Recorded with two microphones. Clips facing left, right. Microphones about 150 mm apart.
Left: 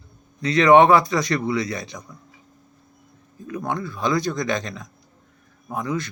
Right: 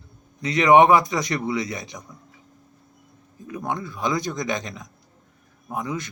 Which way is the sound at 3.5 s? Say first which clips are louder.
Left 2 dB; 20° right (ahead or behind).